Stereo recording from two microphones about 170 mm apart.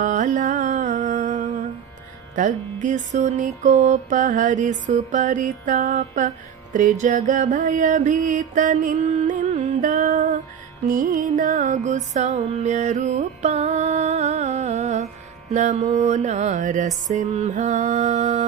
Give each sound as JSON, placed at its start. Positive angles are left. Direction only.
{"t": 0.0, "sound": "music", "side_deg": -50}
{"t": 7.0, "sound": "mantra", "side_deg": -50}
{"t": 10.8, "sound": "music", "side_deg": -55}